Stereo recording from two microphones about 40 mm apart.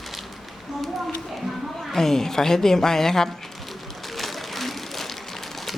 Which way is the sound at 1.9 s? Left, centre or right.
Centre.